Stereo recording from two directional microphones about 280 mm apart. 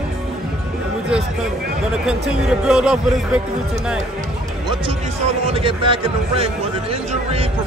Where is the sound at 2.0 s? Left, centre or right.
Centre.